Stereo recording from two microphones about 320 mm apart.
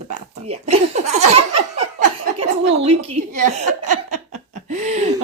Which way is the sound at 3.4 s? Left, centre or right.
Right.